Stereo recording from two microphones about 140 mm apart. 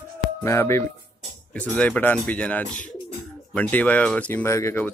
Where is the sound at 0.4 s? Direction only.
20° left (ahead or behind).